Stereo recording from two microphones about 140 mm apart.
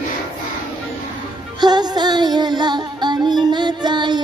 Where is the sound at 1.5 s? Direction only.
30° right (ahead or behind).